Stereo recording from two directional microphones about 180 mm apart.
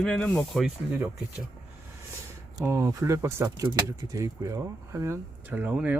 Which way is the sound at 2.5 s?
15° right (ahead or behind).